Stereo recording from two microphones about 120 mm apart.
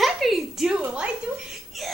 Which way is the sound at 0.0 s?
Centre (ahead or behind).